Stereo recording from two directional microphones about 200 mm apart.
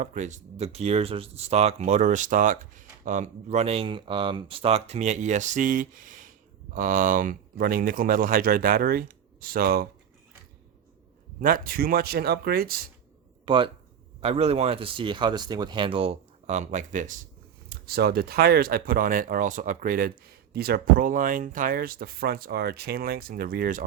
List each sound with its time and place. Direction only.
0.0 s speech: 40° right (ahead or behind)
11.3 s speech: 45° right (ahead or behind)
13.4 s speech: 25° right (ahead or behind)
17.7 s speech: 50° right (ahead or behind)